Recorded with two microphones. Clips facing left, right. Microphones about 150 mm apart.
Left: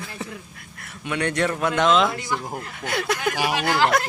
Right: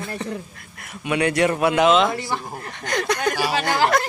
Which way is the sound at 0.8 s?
15° right (ahead or behind).